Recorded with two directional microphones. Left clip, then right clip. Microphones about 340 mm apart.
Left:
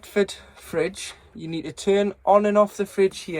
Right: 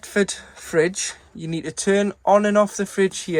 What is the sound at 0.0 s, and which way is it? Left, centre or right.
Speech, right.